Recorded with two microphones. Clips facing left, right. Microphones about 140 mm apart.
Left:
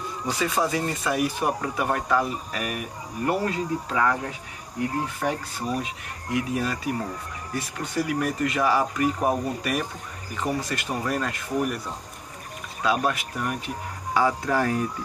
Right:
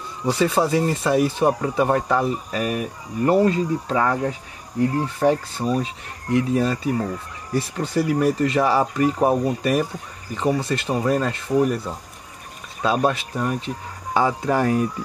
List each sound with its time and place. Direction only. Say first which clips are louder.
0.3 s speech: right 6 dB; 30° right (ahead or behind)
5.2 s speech: right 8 dB; 30° right (ahead or behind)
12.8 s speech: right 4 dB; 30° right (ahead or behind)